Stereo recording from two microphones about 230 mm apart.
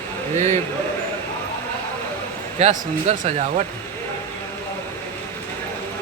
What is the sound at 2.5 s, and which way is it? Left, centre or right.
Speech, right.